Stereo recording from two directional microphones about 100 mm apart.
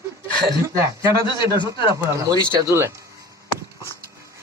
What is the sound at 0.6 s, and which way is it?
Speech, 30° right (ahead or behind).